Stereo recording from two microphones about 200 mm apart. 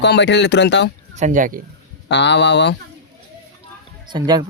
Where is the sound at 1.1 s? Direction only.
40° right (ahead or behind).